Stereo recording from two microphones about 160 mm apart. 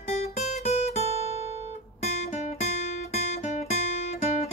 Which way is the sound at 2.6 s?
40° left (ahead or behind).